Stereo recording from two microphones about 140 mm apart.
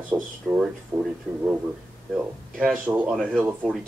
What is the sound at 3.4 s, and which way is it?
Speech, 15° right (ahead or behind).